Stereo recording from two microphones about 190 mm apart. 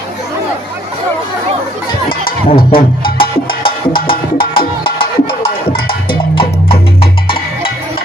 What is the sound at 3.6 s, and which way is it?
Music, 25° left (ahead or behind).